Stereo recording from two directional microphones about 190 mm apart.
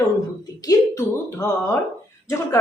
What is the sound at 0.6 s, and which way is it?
Speech, 15° left (ahead or behind).